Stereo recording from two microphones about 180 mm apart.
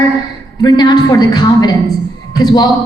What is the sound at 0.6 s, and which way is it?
A woman's voice, 25° left (ahead or behind).